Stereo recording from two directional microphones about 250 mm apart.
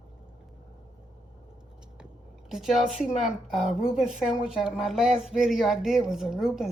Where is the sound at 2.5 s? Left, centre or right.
Centre.